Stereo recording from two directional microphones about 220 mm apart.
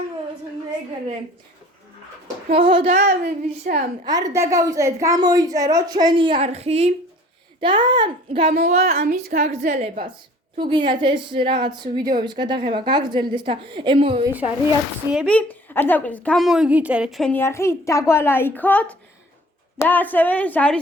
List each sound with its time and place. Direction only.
2.5 s a woman's voice: 25° right (ahead or behind)
2.9 s a woman's voice: 40° right (ahead or behind)
4.0 s a woman's voice: 15° right (ahead or behind)
8.8 s a woman's voice: 45° right (ahead or behind)
10.6 s a woman's voice: 20° right (ahead or behind)
15.1 s a woman's voice: 5° left (ahead or behind)